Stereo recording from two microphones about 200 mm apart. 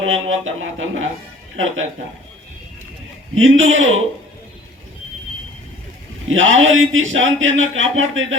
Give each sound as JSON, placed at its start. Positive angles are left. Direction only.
{"t": 0.0, "sound": "speech", "side_deg": -75}
{"t": 3.3, "sound": "speech", "side_deg": -75}
{"t": 6.2, "sound": "speech", "side_deg": -75}